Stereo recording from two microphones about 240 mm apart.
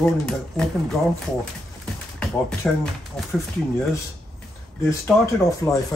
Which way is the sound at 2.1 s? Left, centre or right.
Centre.